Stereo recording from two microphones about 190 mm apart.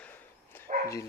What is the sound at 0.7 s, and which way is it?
Bow-wow, 40° right (ahead or behind).